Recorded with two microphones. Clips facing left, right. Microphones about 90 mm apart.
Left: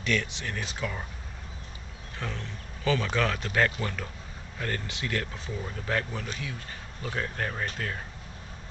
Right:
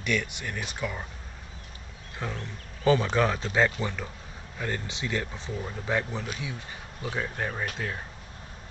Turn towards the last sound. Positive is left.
turn(degrees=-5)  # may be behind; listen again after turning